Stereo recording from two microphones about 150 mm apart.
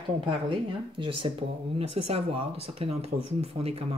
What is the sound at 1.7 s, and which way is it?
Speech, 45° right (ahead or behind).